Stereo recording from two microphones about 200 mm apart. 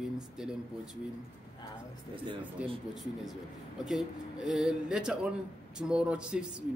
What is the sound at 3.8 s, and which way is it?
Speech, centre (ahead or behind).